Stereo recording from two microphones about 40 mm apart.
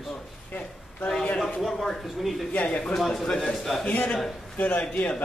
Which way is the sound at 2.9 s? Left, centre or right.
Centre.